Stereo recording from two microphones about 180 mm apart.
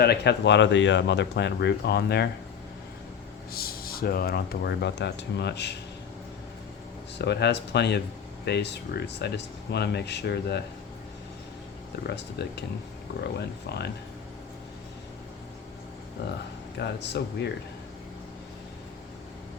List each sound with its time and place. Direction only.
0.0 s speech: 65° left (ahead or behind)
3.5 s speech: 55° left (ahead or behind)
7.2 s speech: 65° left (ahead or behind)
12.0 s speech: 70° left (ahead or behind)
13.7 s speech: 65° left (ahead or behind)
16.7 s speech: 70° left (ahead or behind)